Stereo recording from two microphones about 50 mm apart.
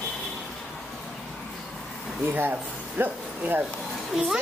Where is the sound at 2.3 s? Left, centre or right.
Right.